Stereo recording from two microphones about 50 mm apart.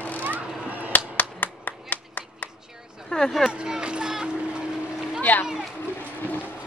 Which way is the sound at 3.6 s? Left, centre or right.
Centre.